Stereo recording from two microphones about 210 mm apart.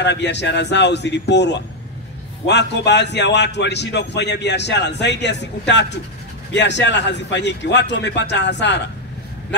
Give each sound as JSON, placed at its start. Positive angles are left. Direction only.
{"t": 0.0, "sound": "a man's voice", "side_deg": 55}